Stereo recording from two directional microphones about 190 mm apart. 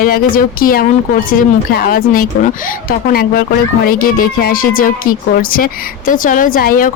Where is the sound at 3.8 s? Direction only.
50° left (ahead or behind).